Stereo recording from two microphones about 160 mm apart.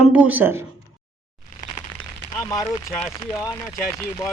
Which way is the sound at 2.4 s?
20° left (ahead or behind).